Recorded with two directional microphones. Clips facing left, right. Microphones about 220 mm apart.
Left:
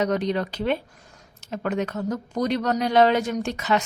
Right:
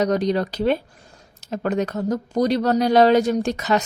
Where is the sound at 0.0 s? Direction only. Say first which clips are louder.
Right 3 dB; 35° right (ahead or behind).